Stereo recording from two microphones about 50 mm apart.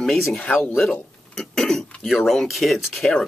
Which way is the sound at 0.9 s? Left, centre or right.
Centre.